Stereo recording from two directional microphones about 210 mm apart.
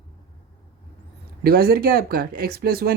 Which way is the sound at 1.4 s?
45° right (ahead or behind).